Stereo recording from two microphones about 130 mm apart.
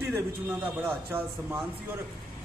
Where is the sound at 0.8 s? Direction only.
20° right (ahead or behind).